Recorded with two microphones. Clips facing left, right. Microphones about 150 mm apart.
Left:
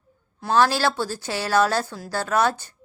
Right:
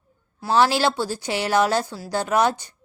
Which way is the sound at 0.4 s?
15° right (ahead or behind).